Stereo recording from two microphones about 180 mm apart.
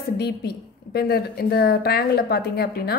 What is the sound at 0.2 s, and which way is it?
A woman's voice, 60° left (ahead or behind).